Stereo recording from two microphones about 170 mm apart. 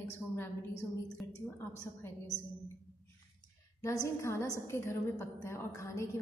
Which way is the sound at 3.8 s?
15° left (ahead or behind).